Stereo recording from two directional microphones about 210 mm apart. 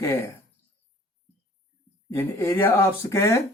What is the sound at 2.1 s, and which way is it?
Speech, 10° left (ahead or behind).